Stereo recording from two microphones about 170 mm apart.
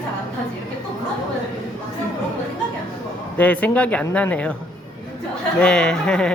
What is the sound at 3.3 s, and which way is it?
Speech, 10° left (ahead or behind).